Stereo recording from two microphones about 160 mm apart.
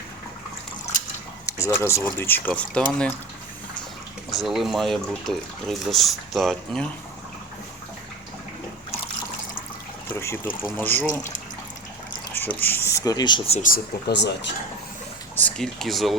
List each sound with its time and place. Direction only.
1.5 s speech: 20° left (ahead or behind)
4.3 s speech: centre (ahead or behind)
10.2 s speech: 15° left (ahead or behind)
12.3 s speech: 10° left (ahead or behind); by 13.6 s 35° left (ahead or behind)
13.6 s speech: 65° left (ahead or behind); by 14.3 s 90° left
15.4 s speech: 5° left (ahead or behind)